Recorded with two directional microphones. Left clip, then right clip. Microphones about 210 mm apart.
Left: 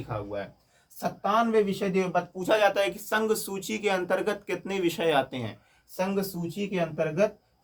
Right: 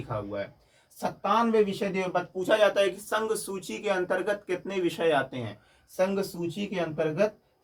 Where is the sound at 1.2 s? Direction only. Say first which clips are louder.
Even; 20° left (ahead or behind); by 5.4 s 35° left (ahead or behind).